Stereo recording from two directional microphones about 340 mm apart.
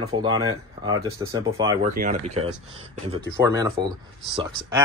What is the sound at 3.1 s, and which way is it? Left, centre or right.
Speech, centre.